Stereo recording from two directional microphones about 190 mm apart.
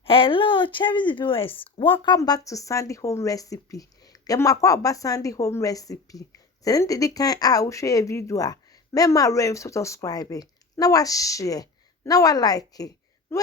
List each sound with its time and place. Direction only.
0.0 s speech: 30° left (ahead or behind)